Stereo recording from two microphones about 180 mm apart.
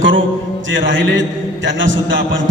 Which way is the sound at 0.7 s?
90° right.